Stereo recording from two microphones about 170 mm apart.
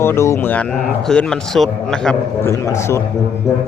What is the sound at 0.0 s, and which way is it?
A man's voice, 15° left (ahead or behind).